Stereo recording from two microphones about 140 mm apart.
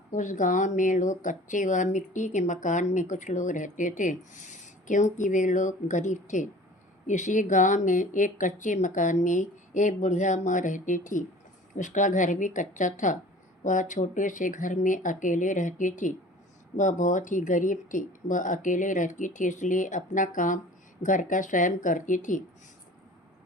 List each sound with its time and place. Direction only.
0.1 s speech: 65° left (ahead or behind)